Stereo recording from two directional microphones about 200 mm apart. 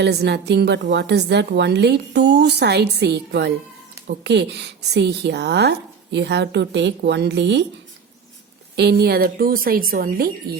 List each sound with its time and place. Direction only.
0.0 s a woman's voice: 55° right (ahead or behind)
8.7 s a woman's voice: 55° right (ahead or behind)